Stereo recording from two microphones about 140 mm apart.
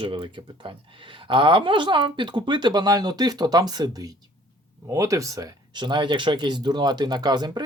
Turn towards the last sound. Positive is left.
turn(degrees=-30)  # may be behind; listen again after turning